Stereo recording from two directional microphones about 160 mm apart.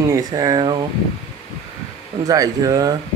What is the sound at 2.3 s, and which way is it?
Speech, 20° right (ahead or behind).